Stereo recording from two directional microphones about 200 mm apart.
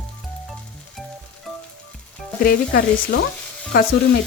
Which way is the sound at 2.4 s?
45° left (ahead or behind).